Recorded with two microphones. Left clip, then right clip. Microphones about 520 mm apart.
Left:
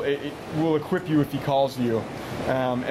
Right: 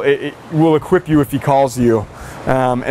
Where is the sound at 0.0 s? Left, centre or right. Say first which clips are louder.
Right 11 dB; right.